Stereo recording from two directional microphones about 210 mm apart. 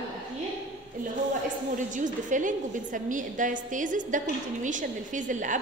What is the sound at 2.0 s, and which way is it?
A woman's voice, 40° right (ahead or behind).